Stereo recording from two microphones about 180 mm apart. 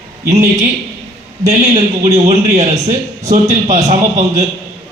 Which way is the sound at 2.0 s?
40° right (ahead or behind).